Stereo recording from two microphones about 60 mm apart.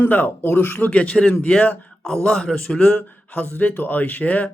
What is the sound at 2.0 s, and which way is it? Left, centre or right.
A man's voice, centre.